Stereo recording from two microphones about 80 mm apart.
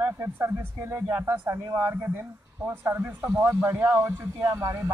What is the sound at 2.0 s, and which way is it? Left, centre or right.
Speech, right.